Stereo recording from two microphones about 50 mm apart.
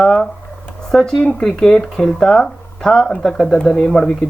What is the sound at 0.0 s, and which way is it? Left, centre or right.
Speech, centre.